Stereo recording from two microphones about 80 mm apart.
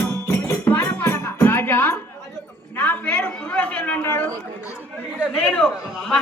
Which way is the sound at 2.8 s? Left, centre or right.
Left.